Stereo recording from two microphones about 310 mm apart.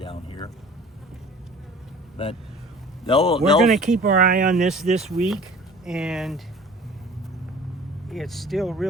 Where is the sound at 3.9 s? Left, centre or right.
Right.